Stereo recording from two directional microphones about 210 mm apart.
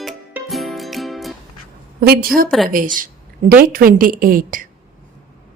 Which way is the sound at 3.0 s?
40° right (ahead or behind).